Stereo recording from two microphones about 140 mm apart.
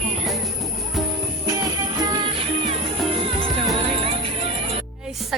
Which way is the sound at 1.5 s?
25° right (ahead or behind).